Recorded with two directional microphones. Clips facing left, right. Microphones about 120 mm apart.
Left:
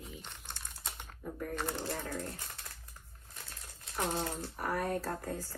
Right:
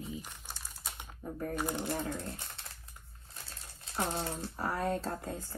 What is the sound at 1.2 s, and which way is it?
Speech, 30° right (ahead or behind).